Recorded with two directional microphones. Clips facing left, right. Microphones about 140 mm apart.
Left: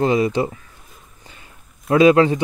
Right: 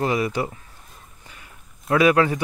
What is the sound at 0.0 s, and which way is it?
Speech, 25° left (ahead or behind).